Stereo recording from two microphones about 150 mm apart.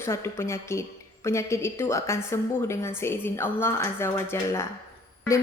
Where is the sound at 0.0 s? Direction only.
15° left (ahead or behind).